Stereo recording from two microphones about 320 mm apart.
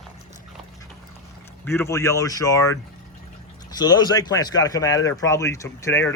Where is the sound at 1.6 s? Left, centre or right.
Centre.